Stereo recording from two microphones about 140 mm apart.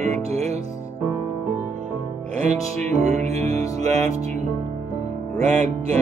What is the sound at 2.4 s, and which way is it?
Music, 55° right (ahead or behind).